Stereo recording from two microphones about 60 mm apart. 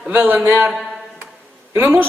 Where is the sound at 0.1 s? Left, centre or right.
Right.